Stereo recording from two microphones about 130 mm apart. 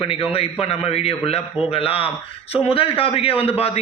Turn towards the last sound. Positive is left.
turn(degrees=50)  # may be behind; listen again after turning